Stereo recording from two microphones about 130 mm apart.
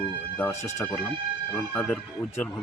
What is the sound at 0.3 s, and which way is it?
Speech, 15° left (ahead or behind).